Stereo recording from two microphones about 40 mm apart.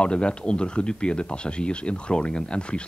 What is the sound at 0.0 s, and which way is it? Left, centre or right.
Speech, left.